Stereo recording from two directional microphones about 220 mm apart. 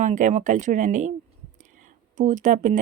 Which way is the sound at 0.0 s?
35° right (ahead or behind).